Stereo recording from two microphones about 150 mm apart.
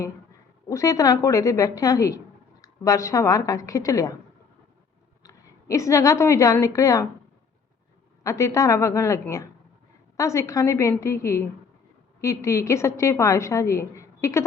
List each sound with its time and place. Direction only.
0.7 s a woman's voice: 20° left (ahead or behind)
5.2 s a woman's voice: 20° left (ahead or behind)
8.2 s a woman's voice: 20° left (ahead or behind)